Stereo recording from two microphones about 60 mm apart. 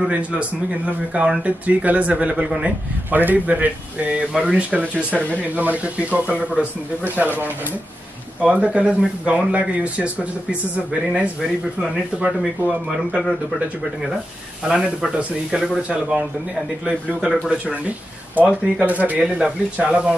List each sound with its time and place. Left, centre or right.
0.1 s speech: right
8.4 s speech: right
11.8 s speech: centre
14.6 s speech: centre